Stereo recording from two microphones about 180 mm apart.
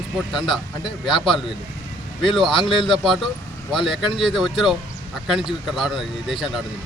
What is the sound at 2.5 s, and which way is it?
Speech, 25° left (ahead or behind).